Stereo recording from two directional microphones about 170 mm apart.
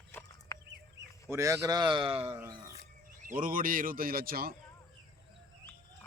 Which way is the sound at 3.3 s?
55° right (ahead or behind).